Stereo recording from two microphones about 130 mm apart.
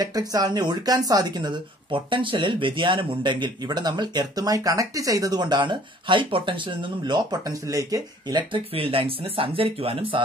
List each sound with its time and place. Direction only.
0.0 s speech: 30° right (ahead or behind); by 10.2 s 45° right (ahead or behind)